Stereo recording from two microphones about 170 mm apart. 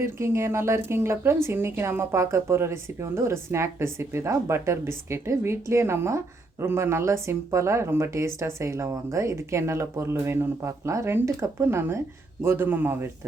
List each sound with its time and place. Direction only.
0.0 s speech: 15° right (ahead or behind)